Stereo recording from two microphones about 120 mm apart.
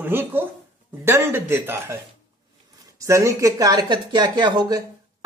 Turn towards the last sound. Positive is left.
turn(degrees=-35)  # may be behind; listen again after turning